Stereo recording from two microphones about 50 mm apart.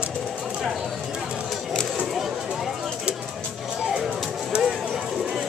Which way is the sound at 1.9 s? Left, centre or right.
Centre.